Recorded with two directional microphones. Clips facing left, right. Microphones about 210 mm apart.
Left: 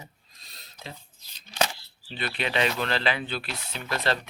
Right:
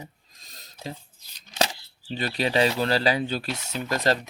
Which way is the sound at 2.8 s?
35° right (ahead or behind).